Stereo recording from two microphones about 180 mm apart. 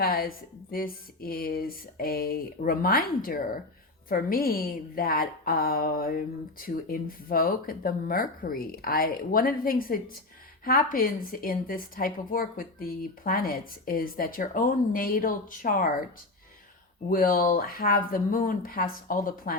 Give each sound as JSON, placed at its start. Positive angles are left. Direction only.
{"t": 0.0, "sound": "a woman's voice", "side_deg": 55}
{"t": 17.1, "sound": "a woman's voice", "side_deg": 55}